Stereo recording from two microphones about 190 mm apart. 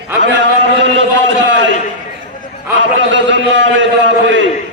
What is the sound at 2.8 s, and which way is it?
A man's voice, 70° right (ahead or behind).